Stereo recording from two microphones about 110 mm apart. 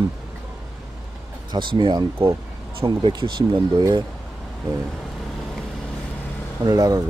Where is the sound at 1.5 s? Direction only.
45° right (ahead or behind).